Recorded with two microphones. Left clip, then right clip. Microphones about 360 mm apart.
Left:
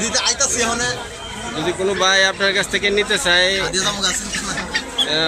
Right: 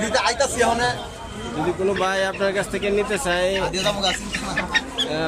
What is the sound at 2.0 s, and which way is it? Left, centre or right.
Speech, centre.